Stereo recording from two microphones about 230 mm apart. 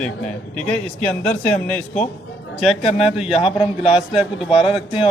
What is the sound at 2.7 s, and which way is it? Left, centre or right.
Speech, left.